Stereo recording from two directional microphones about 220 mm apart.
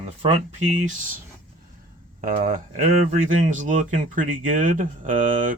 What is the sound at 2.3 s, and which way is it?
Speech, 35° right (ahead or behind).